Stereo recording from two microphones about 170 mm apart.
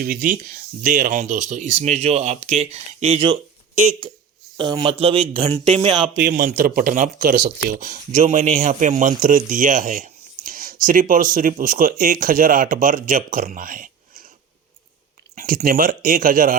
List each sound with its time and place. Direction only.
0.0 s speech: 55° right (ahead or behind); by 3.3 s 35° right (ahead or behind)
4.5 s speech: 25° right (ahead or behind)
6.1 s speech: 55° right (ahead or behind)
7.3 s speech: 70° right (ahead or behind)
7.8 s speech: 45° right (ahead or behind)
15.4 s speech: 55° right (ahead or behind)